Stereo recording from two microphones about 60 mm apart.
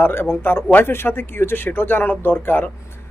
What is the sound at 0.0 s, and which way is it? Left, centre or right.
Speech, left.